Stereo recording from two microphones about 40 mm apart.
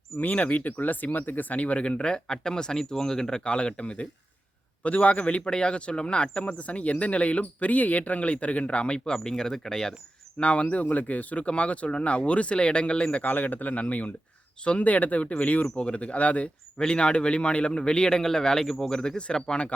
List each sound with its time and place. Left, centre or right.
0.2 s speech: left
9.1 s speech: centre
10.4 s speech: left
13.2 s a man's voice: left
16.7 s speech: left